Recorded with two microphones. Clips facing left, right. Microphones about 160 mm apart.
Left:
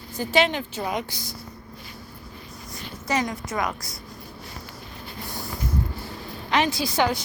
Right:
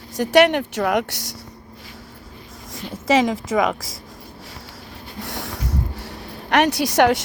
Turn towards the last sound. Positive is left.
turn(degrees=-75)  # may be behind; listen again after turning